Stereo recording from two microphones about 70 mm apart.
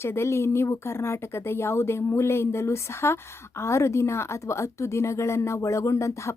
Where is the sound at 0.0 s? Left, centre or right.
Left.